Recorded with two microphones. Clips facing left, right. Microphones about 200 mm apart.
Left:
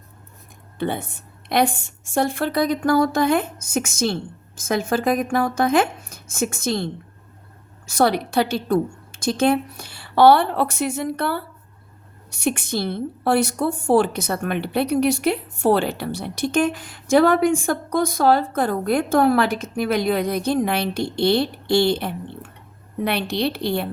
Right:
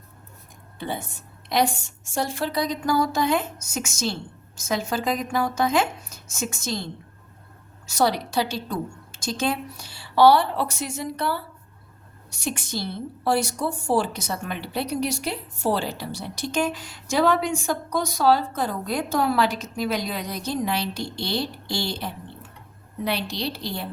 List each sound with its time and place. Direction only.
0.8 s a woman's voice: 60° left (ahead or behind)